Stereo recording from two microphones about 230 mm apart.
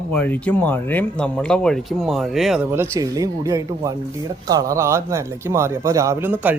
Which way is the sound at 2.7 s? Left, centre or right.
Centre.